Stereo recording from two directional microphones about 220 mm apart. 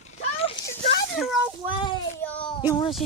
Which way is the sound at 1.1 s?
Centre (ahead or behind).